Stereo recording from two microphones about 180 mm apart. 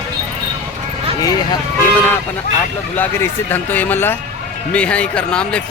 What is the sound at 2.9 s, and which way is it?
Speech, 10° left (ahead or behind).